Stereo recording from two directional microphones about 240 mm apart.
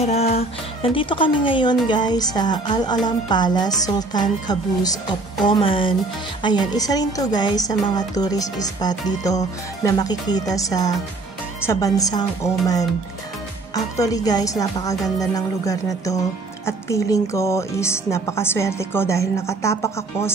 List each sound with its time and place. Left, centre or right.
0.0 s speech: left